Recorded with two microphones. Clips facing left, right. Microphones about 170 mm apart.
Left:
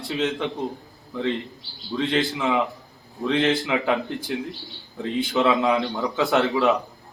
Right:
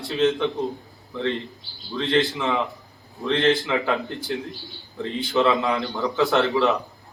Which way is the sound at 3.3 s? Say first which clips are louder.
Right 1 dB; 15° left (ahead or behind).